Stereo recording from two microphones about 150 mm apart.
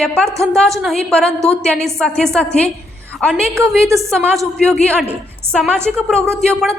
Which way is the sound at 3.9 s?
20° right (ahead or behind).